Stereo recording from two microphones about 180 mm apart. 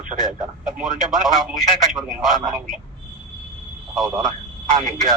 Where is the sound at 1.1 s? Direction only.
Centre (ahead or behind).